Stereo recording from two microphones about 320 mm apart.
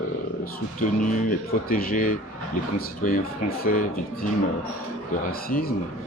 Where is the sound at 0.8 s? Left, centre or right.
Left.